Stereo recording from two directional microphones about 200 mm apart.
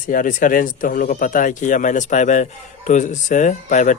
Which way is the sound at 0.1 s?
45° left (ahead or behind).